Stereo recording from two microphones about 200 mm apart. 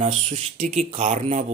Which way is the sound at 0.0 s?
40° right (ahead or behind).